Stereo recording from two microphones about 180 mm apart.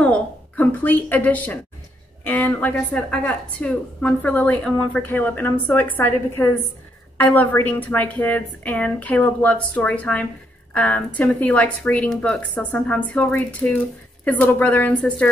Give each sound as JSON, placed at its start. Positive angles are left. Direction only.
{"t": 0.0, "sound": "a woman's voice", "side_deg": 10}